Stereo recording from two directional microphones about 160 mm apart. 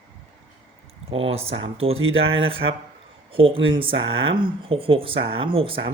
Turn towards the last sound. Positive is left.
turn(degrees=-35)  # may be behind; listen again after turning